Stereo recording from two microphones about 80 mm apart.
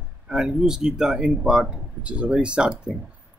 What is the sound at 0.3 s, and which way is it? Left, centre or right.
Speech, centre.